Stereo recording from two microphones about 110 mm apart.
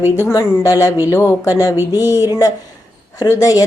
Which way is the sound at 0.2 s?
30° left (ahead or behind).